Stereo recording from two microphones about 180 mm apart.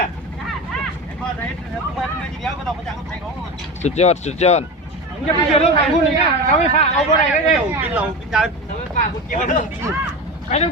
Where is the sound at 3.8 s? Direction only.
40° left (ahead or behind).